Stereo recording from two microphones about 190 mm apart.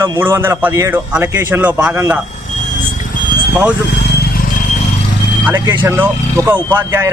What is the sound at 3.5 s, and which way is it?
Speech, 5° right (ahead or behind).